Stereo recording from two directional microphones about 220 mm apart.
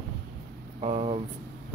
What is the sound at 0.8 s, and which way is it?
Speech, 25° right (ahead or behind).